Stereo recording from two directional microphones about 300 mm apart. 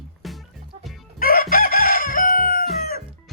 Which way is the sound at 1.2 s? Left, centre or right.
Left.